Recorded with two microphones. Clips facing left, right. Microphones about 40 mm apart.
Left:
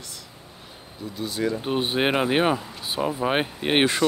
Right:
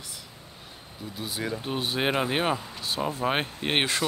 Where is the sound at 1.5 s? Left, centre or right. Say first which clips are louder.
Left 5 dB; centre.